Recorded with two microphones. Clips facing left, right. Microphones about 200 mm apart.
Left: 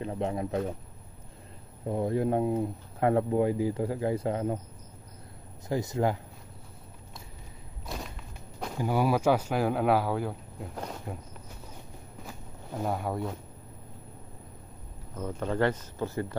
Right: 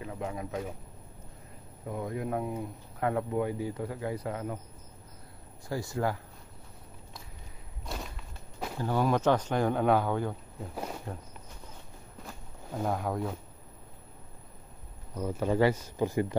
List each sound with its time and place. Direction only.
0.0 s speech: 30° left (ahead or behind)
1.9 s speech: 30° left (ahead or behind)
5.7 s speech: 20° left (ahead or behind)
7.8 s whip: centre (ahead or behind)
8.7 s speech: 10° left (ahead or behind)
10.7 s speech: 5° right (ahead or behind)
12.2 s walk: 5° left (ahead or behind)
15.1 s speech: 10° right (ahead or behind)